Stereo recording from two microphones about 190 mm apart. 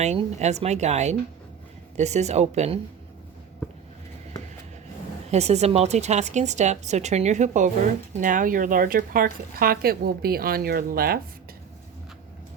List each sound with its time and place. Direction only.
0.0 s speech: 35° right (ahead or behind)
5.3 s speech: 35° right (ahead or behind); by 11.2 s 50° right (ahead or behind)